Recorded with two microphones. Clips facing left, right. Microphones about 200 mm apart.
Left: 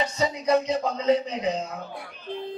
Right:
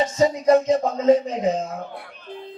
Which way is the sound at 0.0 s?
45° right (ahead or behind).